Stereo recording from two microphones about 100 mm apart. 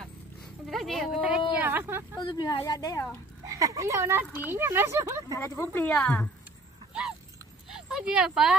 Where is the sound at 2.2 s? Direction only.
50° left (ahead or behind).